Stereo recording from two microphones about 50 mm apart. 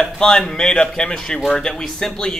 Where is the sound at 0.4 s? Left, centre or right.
Centre.